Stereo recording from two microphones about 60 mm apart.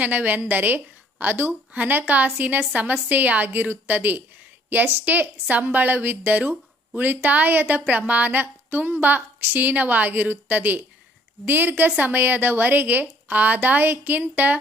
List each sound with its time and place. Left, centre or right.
0.0 s a woman's voice: right